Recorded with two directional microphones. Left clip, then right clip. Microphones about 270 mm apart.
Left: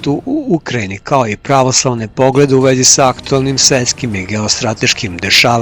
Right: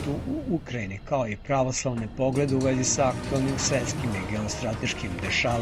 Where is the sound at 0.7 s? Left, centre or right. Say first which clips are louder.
Left 15 dB; left.